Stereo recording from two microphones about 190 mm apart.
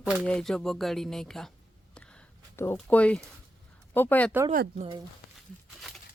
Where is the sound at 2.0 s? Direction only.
10° left (ahead or behind).